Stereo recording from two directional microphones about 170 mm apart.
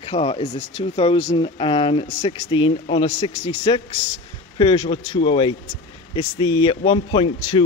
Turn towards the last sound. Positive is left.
turn(degrees=30)  # may be behind; listen again after turning